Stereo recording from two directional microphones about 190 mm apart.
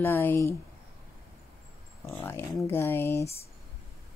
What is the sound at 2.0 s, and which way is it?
Speech, 15° left (ahead or behind).